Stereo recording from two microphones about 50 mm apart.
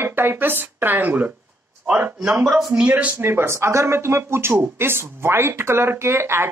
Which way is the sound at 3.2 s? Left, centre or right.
Right.